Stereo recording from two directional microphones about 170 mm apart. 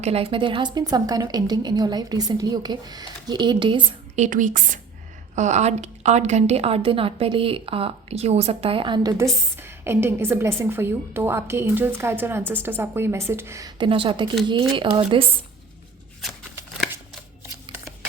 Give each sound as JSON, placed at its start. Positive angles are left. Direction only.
{"t": 0.0, "sound": "a woman's voice", "side_deg": -35}
{"t": 4.1, "sound": "a woman's voice", "side_deg": -45}
{"t": 9.1, "sound": "a woman's voice", "side_deg": -15}